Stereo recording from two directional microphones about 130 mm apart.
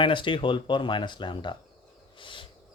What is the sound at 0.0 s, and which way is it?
Speech, 40° left (ahead or behind).